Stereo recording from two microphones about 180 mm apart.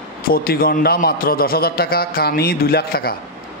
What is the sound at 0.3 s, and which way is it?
A man's voice, 55° left (ahead or behind).